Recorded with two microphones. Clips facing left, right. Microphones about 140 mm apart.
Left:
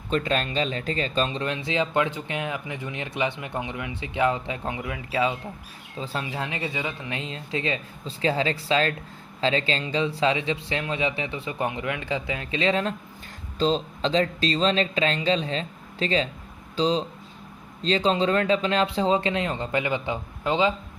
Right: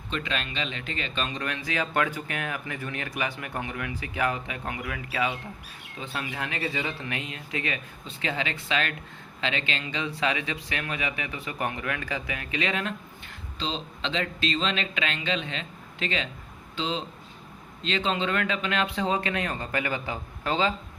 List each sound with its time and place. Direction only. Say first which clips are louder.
0.1 s speech: left 7 dB; 40° left (ahead or behind)
13.6 s speech: left 9 dB; 40° left (ahead or behind); by 20.7 s 20° left (ahead or behind)